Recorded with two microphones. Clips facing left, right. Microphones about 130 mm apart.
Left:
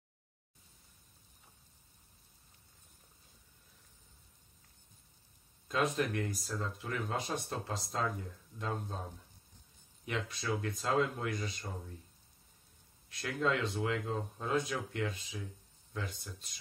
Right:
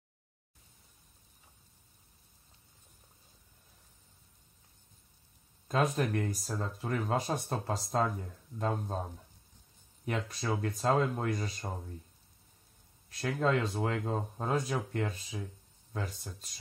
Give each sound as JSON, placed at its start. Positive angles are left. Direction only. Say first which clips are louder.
{"t": 5.7, "sound": "speech", "louder": "right 3 dB", "side_deg": -45}
{"t": 10.0, "sound": "speech", "louder": "right 3 dB", "side_deg": -40}
{"t": 13.2, "sound": "speech", "louder": "right 3 dB", "side_deg": -40}